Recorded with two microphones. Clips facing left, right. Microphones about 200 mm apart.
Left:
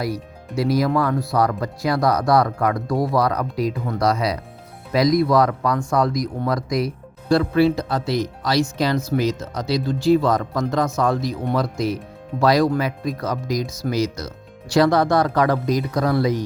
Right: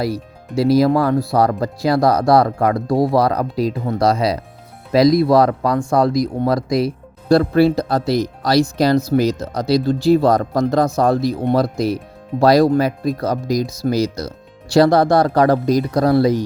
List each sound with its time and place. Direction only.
0.0 s speech: 30° right (ahead or behind)